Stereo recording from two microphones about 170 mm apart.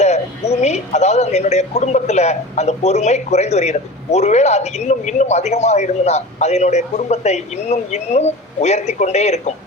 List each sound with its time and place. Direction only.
0.0 s a man's voice: 40° left (ahead or behind)